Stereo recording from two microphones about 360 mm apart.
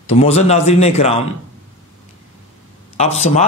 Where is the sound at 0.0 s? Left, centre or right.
Centre.